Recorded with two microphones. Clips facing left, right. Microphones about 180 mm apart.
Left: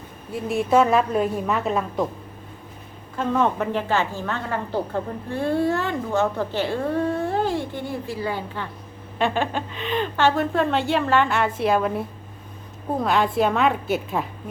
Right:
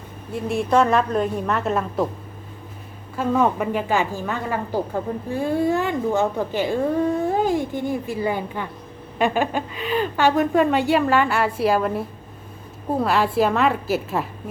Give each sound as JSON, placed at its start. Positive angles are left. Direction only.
{"t": 0.3, "sound": "a woman's voice", "side_deg": 0}
{"t": 3.2, "sound": "a woman's voice", "side_deg": -10}